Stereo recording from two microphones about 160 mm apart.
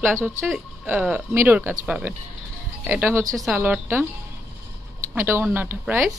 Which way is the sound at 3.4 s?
5° right (ahead or behind).